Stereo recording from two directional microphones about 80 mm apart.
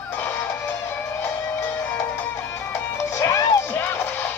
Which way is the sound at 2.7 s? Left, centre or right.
Left.